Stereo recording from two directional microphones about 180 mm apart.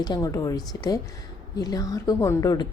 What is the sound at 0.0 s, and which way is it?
A woman's voice, 20° left (ahead or behind).